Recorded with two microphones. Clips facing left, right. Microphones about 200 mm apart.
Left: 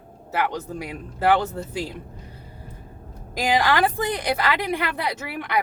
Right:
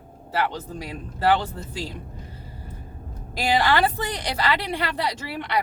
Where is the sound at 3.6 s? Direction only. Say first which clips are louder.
Left 1 dB; 10° left (ahead or behind).